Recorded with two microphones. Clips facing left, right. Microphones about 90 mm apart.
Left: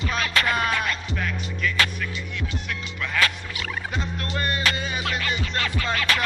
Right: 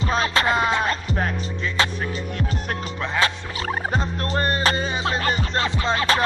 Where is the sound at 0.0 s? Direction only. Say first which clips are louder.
Right 4 dB; 30° right (ahead or behind).